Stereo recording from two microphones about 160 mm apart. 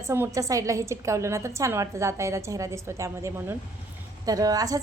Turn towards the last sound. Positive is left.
turn(degrees=-25)  # may be behind; listen again after turning